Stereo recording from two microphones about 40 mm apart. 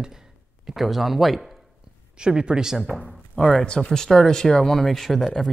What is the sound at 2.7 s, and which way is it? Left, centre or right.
Speech, centre.